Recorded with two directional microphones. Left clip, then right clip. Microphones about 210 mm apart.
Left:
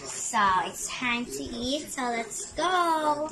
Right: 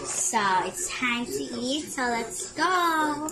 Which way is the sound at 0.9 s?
15° left (ahead or behind).